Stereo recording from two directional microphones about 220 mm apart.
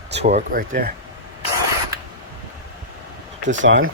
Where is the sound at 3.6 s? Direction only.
60° right (ahead or behind).